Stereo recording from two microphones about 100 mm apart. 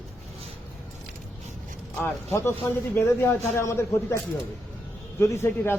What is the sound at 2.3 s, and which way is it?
A man's voice, 25° left (ahead or behind).